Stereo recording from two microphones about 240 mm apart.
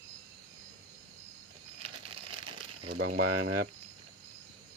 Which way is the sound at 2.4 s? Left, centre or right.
Right.